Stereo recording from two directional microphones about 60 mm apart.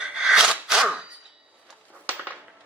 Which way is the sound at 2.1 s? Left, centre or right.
Right.